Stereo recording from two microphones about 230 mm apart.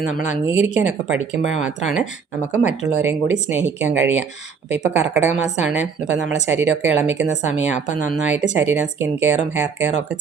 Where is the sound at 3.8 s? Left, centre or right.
Centre.